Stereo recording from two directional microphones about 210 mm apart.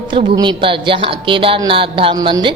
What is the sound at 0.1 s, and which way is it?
A woman's voice, 25° right (ahead or behind).